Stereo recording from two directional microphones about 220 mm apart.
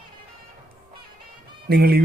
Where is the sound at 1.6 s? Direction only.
45° right (ahead or behind).